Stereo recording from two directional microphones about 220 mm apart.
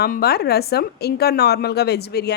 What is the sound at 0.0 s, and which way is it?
A woman's voice, 45° left (ahead or behind).